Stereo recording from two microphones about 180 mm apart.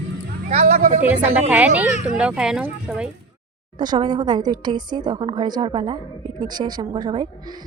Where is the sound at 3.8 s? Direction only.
25° right (ahead or behind).